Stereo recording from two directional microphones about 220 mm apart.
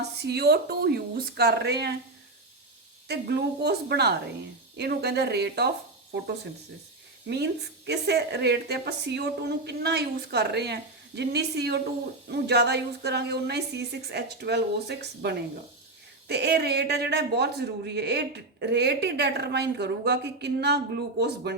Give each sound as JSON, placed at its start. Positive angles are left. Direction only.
{"t": 0.0, "sound": "a man's voice", "side_deg": -50}
{"t": 3.1, "sound": "a man's voice", "side_deg": -50}
{"t": 7.3, "sound": "a man's voice", "side_deg": -50}